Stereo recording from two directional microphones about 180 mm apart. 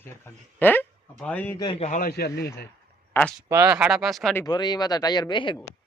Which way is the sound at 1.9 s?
55° left (ahead or behind).